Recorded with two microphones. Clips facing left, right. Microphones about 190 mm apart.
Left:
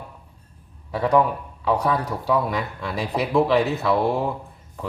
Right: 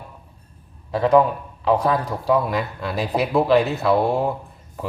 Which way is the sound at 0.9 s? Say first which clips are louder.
Right 4 dB; 20° right (ahead or behind).